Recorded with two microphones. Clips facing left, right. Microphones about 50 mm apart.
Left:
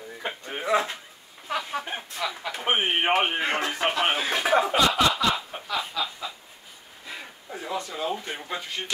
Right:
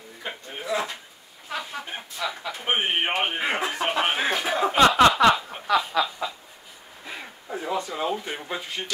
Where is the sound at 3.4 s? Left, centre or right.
Centre.